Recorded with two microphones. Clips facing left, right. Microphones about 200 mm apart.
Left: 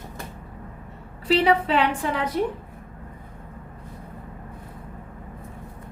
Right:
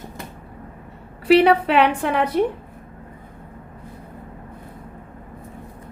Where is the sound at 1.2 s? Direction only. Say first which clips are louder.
Right 6 dB; 65° right (ahead or behind).